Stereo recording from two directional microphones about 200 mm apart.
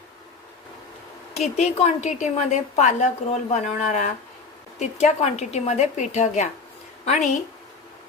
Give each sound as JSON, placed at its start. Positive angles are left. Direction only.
{"t": 1.5, "sound": "a woman's voice", "side_deg": 35}